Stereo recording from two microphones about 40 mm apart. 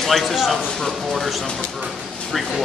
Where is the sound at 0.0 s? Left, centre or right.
Centre.